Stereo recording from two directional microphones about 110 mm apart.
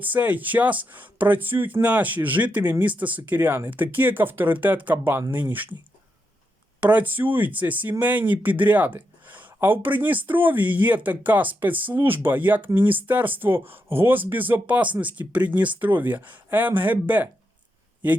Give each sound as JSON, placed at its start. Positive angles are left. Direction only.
{"t": 0.0, "sound": "speech", "side_deg": -15}
{"t": 6.7, "sound": "speech", "side_deg": -15}